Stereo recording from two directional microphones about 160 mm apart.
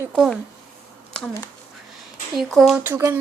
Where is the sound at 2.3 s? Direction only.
Centre (ahead or behind).